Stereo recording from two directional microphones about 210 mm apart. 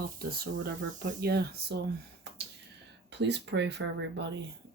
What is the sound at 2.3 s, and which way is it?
Finger snapping, 55° right (ahead or behind).